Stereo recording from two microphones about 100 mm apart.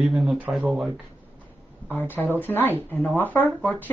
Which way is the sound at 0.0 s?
5° right (ahead or behind).